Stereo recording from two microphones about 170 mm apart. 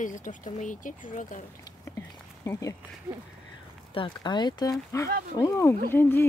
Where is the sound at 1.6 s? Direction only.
20° left (ahead or behind).